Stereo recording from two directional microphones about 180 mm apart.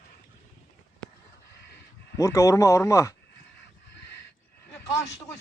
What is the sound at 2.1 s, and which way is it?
Speech, 15° left (ahead or behind).